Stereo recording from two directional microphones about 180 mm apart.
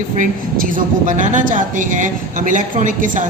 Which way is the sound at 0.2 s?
45° right (ahead or behind).